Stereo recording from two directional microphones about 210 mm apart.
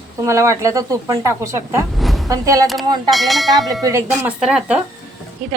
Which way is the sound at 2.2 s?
15° right (ahead or behind).